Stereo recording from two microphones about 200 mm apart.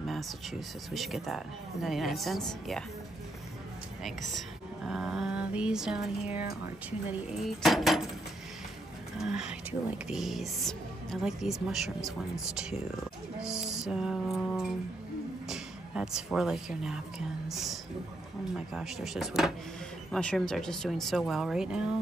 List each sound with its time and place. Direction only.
0.9 s speech: centre (ahead or behind)
4.8 s speech: centre (ahead or behind)
7.1 s speech: 5° right (ahead or behind)
9.2 s speech: 5° right (ahead or behind)
13.4 s music: 5° right (ahead or behind)
15.4 s speech: 5° right (ahead or behind)